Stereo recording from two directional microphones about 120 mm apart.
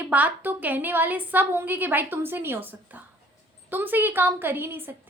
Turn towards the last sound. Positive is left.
turn(degrees=-15)  # may be behind; listen again after turning